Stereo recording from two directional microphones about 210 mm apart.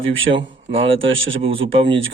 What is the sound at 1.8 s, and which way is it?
Speech, 65° right (ahead or behind).